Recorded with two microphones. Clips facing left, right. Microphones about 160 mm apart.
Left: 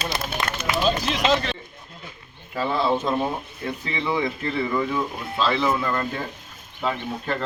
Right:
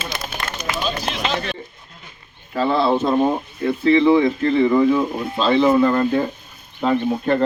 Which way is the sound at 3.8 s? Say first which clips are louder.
Right 12 dB; 35° right (ahead or behind).